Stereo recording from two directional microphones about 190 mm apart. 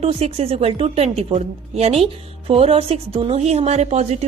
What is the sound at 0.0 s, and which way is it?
A woman's voice, 30° right (ahead or behind).